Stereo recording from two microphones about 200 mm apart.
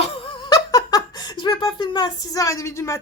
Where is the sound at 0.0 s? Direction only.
25° left (ahead or behind).